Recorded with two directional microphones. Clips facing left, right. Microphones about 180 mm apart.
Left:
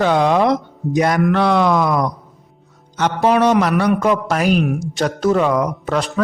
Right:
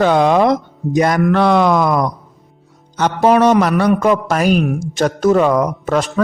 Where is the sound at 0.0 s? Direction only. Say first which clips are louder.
Right 3 dB; 45° right (ahead or behind).